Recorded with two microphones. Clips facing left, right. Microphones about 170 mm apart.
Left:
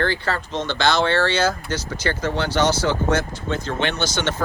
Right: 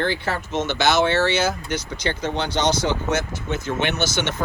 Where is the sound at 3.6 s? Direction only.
10° right (ahead or behind).